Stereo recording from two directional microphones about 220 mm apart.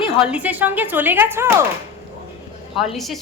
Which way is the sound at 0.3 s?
5° right (ahead or behind).